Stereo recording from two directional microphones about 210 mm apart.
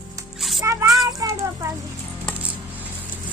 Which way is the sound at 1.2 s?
15° right (ahead or behind).